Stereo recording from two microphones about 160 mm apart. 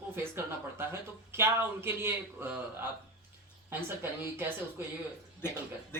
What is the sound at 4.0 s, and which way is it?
Speech, 15° right (ahead or behind).